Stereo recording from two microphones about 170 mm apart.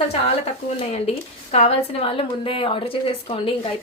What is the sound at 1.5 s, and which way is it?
A woman's voice, 40° left (ahead or behind).